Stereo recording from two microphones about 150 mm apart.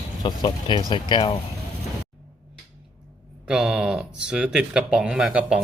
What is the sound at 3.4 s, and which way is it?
Speech, 5° right (ahead or behind).